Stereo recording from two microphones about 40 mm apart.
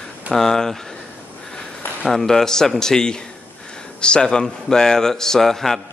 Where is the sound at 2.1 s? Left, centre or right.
Centre.